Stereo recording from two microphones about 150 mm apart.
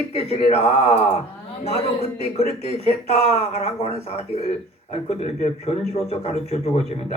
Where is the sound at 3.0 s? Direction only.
45° left (ahead or behind).